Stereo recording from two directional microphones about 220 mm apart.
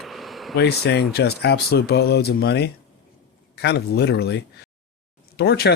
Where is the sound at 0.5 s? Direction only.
50° left (ahead or behind).